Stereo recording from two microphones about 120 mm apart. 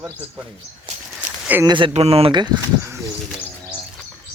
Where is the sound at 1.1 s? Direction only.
10° right (ahead or behind).